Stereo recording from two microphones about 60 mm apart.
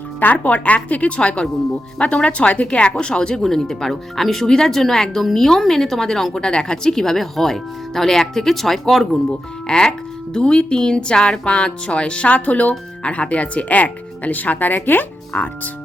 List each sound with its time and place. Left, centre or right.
0.2 s speech: left